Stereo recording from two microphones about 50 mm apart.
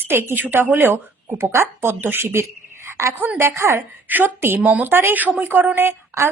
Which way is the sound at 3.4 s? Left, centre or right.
Right.